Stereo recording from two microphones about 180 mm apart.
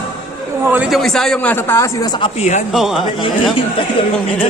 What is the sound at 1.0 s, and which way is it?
Speech, centre (ahead or behind).